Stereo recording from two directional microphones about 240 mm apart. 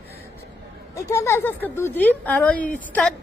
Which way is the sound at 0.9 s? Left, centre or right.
Centre.